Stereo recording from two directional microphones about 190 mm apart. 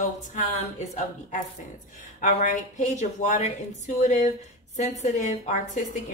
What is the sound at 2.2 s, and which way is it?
A woman's voice, 40° left (ahead or behind).